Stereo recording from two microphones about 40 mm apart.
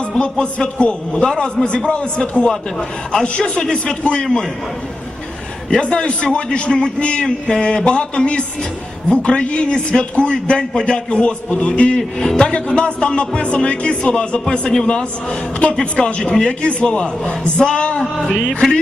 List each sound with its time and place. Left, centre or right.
0.1 s speech: centre
3.6 s speech: centre
5.8 s speech: left
11.9 s speech: centre
12.5 s speech: left
14.8 s speech: left